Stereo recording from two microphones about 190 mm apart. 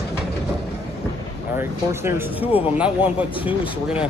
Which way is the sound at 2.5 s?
30° left (ahead or behind).